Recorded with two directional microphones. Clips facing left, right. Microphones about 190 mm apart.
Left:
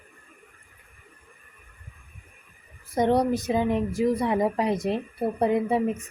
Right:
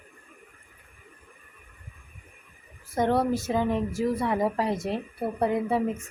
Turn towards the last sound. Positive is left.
turn(degrees=20)  # may be behind; listen again after turning